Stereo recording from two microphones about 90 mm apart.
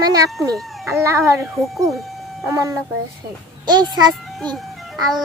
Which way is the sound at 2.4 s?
40° right (ahead or behind).